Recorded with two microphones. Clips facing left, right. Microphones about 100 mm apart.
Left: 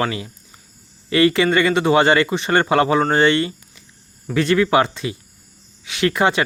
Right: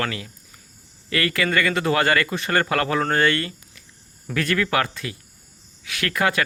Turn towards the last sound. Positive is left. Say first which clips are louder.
# left 5 dB
turn(degrees=25)  # may be behind; listen again after turning